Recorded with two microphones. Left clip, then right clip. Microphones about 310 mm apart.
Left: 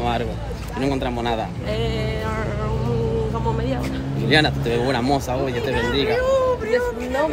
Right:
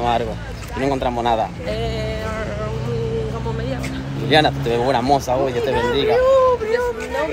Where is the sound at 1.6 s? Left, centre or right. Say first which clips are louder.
Right 1 dB; centre.